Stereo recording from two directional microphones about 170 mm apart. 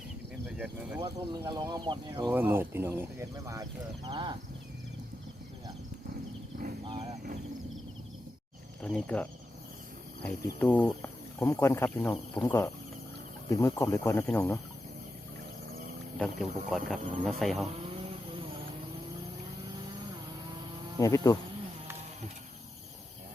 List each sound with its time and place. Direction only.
0.4 s speech: 5° right (ahead or behind)
0.9 s speech: 25° right (ahead or behind)
2.3 s speech: 10° right (ahead or behind)
6.8 s vehicle: 30° right (ahead or behind)
8.8 s speech: 5° left (ahead or behind)
16.1 s speech: 5° left (ahead or behind)
17.0 s speech: 50° right (ahead or behind)
17.2 s speech: centre (ahead or behind)
17.7 s vehicle: 35° right (ahead or behind)
21.0 s insect: 20° left (ahead or behind)